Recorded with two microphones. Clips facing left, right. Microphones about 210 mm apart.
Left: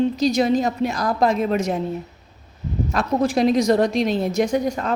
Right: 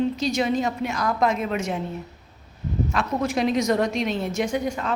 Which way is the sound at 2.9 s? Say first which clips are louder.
Left 6 dB; 35° left (ahead or behind).